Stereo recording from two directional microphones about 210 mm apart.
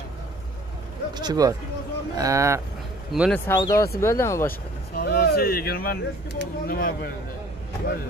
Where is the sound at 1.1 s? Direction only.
20° right (ahead or behind).